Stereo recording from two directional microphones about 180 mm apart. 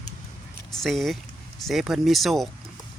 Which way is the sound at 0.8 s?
Centre (ahead or behind).